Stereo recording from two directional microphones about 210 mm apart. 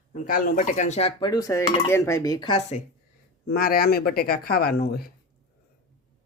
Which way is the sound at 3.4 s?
45° left (ahead or behind).